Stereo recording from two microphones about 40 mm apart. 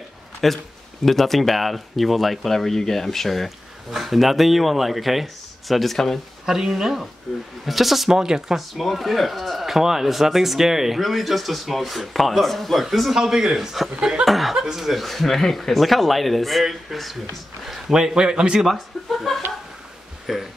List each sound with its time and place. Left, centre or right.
0.4 s speech: centre
6.4 s a man's voice: centre
8.2 s a man's voice: centre
8.7 s speech: centre
13.2 s a man's voice: centre
13.6 s speech: centre
17.9 s a man's voice: centre
18.7 s speech: centre